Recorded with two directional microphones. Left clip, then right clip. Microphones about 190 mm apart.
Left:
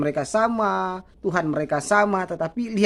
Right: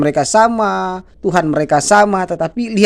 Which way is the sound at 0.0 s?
25° right (ahead or behind).